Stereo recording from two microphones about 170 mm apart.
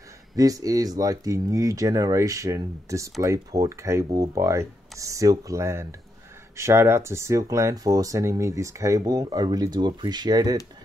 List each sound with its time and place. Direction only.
0.4 s speech: 20° right (ahead or behind)